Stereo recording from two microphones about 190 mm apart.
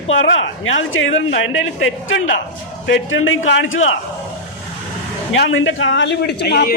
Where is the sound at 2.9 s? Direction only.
90° left.